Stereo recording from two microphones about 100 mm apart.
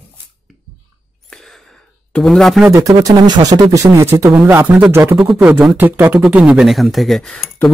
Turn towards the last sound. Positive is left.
turn(degrees=5)  # may be behind; listen again after turning